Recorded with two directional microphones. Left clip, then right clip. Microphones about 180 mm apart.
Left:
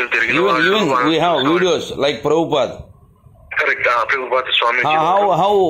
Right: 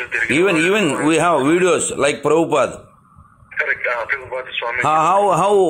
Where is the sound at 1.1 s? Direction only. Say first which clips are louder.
Even; centre (ahead or behind).